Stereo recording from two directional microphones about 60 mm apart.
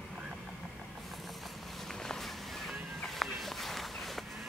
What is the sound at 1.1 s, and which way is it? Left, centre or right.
Cat, centre.